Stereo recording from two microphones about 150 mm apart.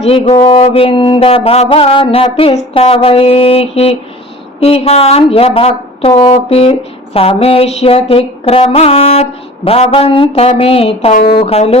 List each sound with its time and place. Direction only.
0.0 s a woman's voice: 40° left (ahead or behind)